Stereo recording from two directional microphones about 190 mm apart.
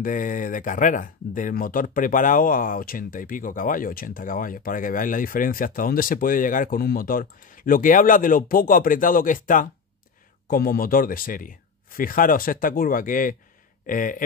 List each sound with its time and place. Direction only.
0.0 s speech: 45° left (ahead or behind)